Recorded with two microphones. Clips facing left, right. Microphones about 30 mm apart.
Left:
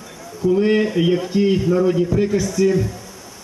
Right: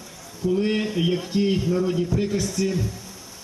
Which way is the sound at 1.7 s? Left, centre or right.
Centre.